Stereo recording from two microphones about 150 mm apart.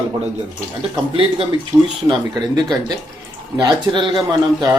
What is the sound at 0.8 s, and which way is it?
Speech, 35° right (ahead or behind).